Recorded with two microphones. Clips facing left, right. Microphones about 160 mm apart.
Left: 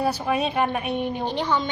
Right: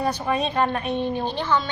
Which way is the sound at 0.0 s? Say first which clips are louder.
Even; 10° left (ahead or behind).